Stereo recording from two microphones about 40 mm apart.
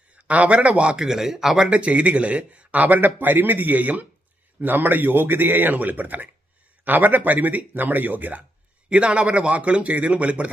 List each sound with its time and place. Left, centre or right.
0.2 s a man's voice: right
0.9 s speech: centre
1.5 s speech: right
4.6 s a man's voice: right
8.9 s speech: right